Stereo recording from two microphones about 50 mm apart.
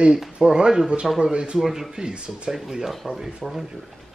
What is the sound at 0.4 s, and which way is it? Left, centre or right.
Speech, centre.